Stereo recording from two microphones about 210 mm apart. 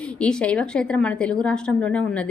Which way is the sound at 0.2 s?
5° left (ahead or behind).